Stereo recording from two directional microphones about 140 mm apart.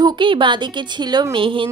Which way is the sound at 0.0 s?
35° right (ahead or behind).